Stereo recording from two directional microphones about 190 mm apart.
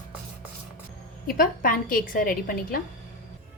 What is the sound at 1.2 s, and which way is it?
A woman's voice, 50° left (ahead or behind).